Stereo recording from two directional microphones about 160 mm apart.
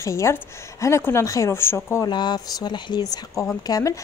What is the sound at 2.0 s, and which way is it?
A woman's voice, 25° left (ahead or behind).